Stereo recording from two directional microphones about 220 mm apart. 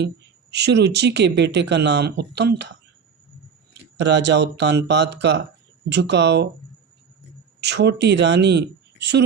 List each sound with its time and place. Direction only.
0.5 s speech: 50° right (ahead or behind)
3.9 s speech: 50° right (ahead or behind)
7.6 s speech: 50° right (ahead or behind)